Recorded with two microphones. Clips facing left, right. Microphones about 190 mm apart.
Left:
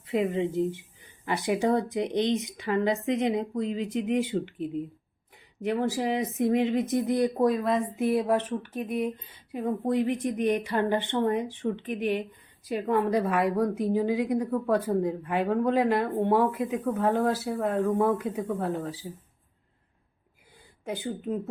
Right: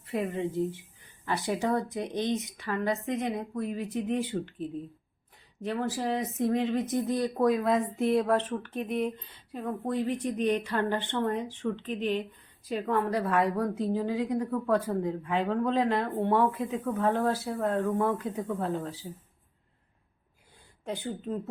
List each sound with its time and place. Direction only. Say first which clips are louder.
0.0 s a woman's voice: left 4 dB; 20° left (ahead or behind)
7.4 s a woman's voice: left 1 dB; centre (ahead or behind)
20.8 s a woman's voice: left 2 dB; 10° left (ahead or behind)